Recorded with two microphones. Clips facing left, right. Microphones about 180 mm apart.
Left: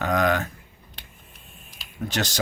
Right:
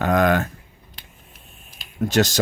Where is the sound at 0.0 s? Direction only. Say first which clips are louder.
Right 4 dB; 50° right (ahead or behind).